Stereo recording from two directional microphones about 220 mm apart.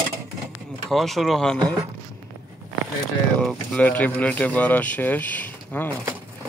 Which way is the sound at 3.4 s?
5° left (ahead or behind).